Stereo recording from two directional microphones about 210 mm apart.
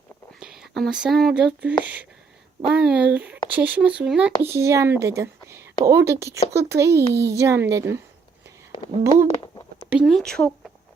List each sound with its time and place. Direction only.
0.3 s speech: centre (ahead or behind)
9.4 s a sound: 20° left (ahead or behind)
10.0 s speech: centre (ahead or behind)